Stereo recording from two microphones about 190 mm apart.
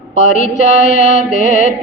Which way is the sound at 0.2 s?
40° left (ahead or behind).